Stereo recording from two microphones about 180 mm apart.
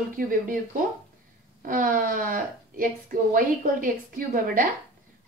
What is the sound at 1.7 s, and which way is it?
Speech, 50° right (ahead or behind).